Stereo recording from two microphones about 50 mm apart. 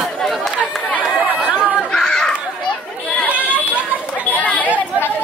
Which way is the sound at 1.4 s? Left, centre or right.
Right.